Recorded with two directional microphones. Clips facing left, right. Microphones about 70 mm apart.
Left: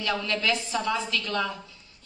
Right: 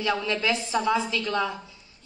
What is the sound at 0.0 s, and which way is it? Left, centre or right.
A woman's voice, centre.